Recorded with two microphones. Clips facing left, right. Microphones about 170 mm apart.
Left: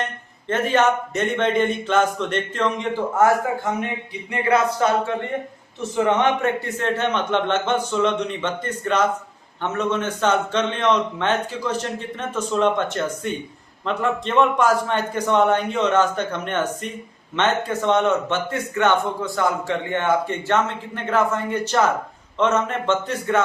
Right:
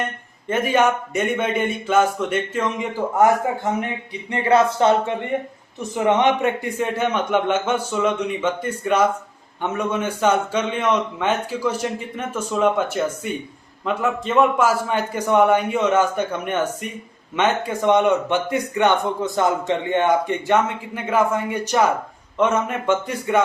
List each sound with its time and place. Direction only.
0.4 s a man's voice: 10° right (ahead or behind)
3.2 s a man's voice: 20° right (ahead or behind)